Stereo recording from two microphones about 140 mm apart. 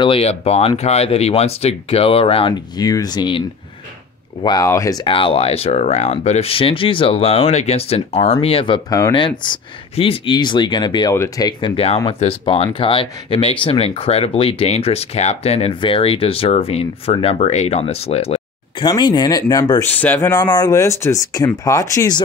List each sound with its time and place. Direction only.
0.0 s speech: 45° left (ahead or behind)
2.8 s speech: 25° left (ahead or behind)
5.0 s speech: 40° left (ahead or behind)
11.7 s speech: 45° left (ahead or behind)
18.9 s speech: 30° left (ahead or behind)
19.9 s speech: 10° left (ahead or behind)